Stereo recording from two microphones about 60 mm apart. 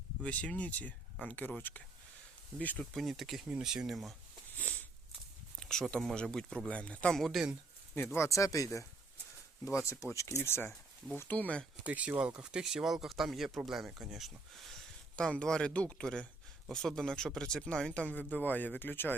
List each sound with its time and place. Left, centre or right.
0.2 s speech: left
2.9 s speech: centre
4.5 s a sound: left
5.5 s a sound: centre
6.1 s speech: centre
7.1 s speech: centre
7.9 s speech: left
8.3 s speech: left
11.3 s speech: left
11.9 s speech: right; by 14.8 s centre
15.1 s speech: centre
16.6 s speech: centre
18.1 s speech: left